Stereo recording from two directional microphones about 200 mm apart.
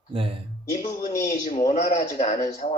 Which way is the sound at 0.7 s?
35° left (ahead or behind).